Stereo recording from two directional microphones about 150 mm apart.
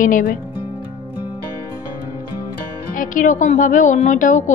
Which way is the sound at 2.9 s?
60° left (ahead or behind).